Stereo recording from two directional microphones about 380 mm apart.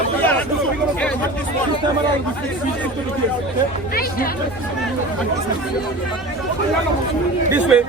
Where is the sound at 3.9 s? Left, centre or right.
Left.